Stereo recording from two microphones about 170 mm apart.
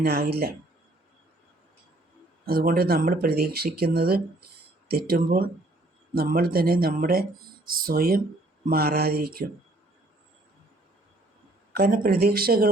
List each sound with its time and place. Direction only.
0.0 s speech: 65° right (ahead or behind)
2.4 s speech: 60° right (ahead or behind)
11.7 s speech: 60° right (ahead or behind)